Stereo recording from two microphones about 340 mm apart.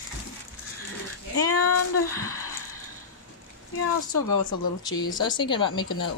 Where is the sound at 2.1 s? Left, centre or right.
Centre.